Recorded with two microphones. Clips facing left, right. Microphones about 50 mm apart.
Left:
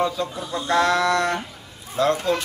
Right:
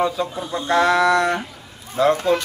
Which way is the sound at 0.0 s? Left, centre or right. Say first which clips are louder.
Right 2 dB; centre.